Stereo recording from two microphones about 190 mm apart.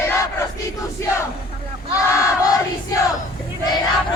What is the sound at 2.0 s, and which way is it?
Crowd, 15° left (ahead or behind).